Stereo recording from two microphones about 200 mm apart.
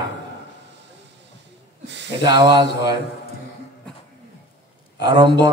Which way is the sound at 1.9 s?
60° right (ahead or behind).